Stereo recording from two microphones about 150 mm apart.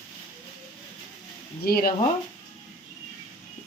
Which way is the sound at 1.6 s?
90° left.